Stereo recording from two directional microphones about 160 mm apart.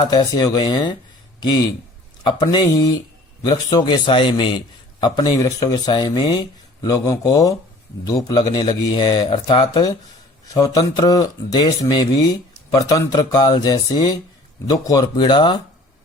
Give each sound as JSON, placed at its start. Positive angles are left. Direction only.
{"t": 0.1, "sound": "a man's voice", "side_deg": 25}
{"t": 2.2, "sound": "a man's voice", "side_deg": 30}